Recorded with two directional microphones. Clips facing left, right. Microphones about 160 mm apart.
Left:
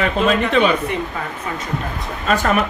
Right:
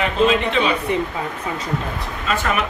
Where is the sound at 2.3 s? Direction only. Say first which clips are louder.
Left 4 dB; 45° left (ahead or behind).